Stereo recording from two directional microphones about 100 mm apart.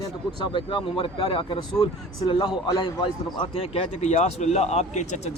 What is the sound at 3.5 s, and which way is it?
Speech, 90° left.